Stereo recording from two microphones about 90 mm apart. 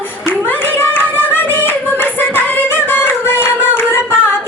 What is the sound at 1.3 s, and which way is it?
Music, 20° left (ahead or behind).